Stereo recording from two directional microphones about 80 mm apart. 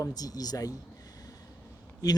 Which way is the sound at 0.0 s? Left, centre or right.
Left.